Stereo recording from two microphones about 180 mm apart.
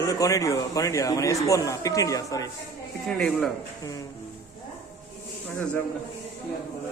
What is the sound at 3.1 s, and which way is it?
Speech, 5° left (ahead or behind).